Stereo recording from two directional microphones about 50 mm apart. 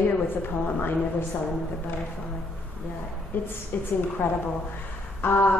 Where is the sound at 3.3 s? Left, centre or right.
Left.